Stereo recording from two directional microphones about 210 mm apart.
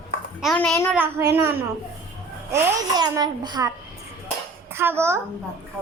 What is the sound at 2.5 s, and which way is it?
A child's voice, 20° right (ahead or behind).